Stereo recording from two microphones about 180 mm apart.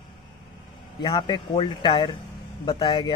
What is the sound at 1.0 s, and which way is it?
Speech, 25° left (ahead or behind).